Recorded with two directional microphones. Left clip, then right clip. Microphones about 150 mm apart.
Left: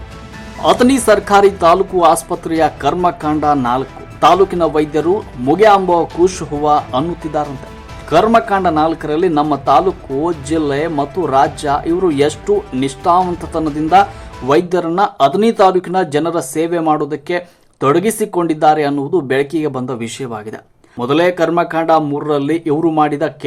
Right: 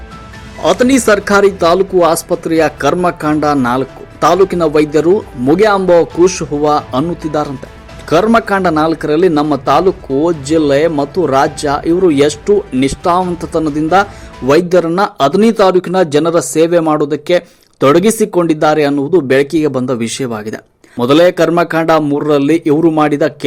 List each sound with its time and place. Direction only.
0.6 s a man's voice: 5° right (ahead or behind)